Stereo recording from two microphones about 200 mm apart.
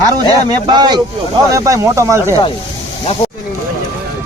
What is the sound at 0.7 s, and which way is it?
Speech, 20° right (ahead or behind).